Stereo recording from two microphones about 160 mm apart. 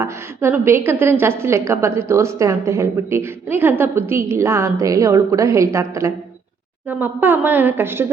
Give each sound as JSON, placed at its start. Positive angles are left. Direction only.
{"t": 0.0, "sound": "a woman's voice", "side_deg": -15}